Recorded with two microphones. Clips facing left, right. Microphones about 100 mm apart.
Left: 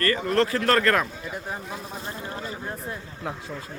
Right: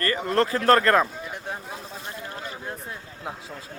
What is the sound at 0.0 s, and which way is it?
Speech, 25° right (ahead or behind).